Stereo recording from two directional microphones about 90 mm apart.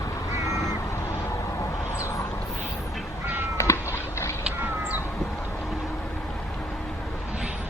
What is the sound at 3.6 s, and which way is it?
Cat, 35° left (ahead or behind).